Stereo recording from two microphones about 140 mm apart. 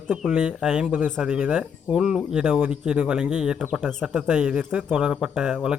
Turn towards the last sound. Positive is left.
turn(degrees=-5)  # may be behind; listen again after turning